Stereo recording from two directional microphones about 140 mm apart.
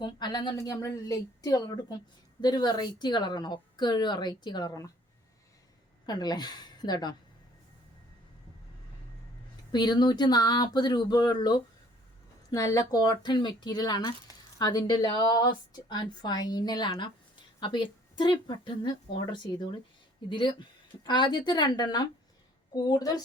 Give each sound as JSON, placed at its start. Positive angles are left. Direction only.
{"t": 0.0, "sound": "a woman's voice", "side_deg": 30}
{"t": 6.1, "sound": "a woman's voice", "side_deg": 30}
{"t": 9.7, "sound": "a woman's voice", "side_deg": 30}